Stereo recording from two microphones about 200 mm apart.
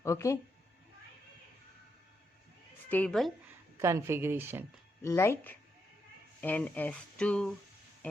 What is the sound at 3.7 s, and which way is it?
Speech, 15° right (ahead or behind).